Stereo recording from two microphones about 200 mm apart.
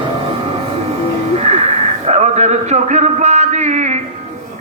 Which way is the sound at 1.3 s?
30° right (ahead or behind).